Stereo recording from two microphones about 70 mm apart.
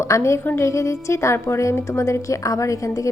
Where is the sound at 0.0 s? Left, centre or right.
Left.